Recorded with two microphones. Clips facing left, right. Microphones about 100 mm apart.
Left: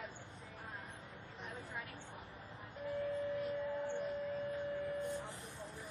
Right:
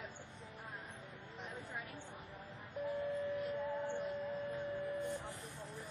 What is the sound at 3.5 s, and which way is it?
Music, 15° right (ahead or behind).